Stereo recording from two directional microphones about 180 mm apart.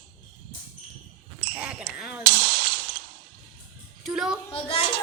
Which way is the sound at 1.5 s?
5° right (ahead or behind).